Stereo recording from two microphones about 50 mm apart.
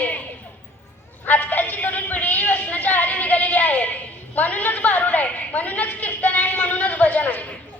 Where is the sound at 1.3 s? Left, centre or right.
Left.